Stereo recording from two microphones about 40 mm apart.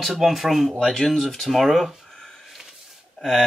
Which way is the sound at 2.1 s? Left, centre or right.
Centre.